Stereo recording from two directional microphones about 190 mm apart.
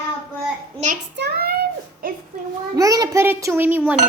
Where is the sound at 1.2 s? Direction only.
55° right (ahead or behind).